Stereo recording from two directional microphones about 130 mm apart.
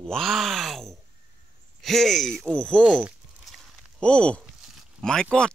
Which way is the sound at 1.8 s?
Centre (ahead or behind).